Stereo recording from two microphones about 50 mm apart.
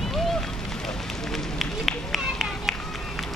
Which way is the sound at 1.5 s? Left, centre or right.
Centre.